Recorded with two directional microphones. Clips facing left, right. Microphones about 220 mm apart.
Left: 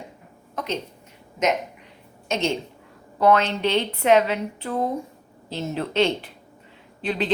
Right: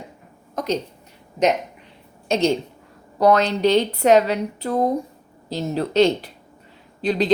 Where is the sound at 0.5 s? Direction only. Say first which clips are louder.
Right 5 dB; 40° right (ahead or behind).